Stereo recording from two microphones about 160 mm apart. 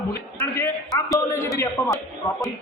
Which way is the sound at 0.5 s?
20° left (ahead or behind).